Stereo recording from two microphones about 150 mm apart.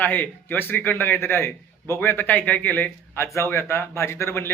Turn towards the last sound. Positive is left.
turn(degrees=15)  # may be behind; listen again after turning